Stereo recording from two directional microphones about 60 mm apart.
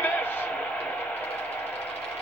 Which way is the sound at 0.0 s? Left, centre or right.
Left.